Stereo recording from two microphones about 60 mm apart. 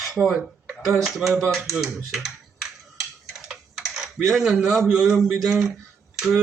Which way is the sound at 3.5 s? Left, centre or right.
Centre.